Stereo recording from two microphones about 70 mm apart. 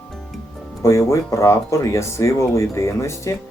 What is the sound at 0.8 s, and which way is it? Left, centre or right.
Speech, left.